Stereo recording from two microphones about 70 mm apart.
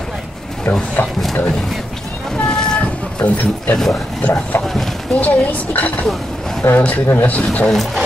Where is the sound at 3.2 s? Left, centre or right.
Left.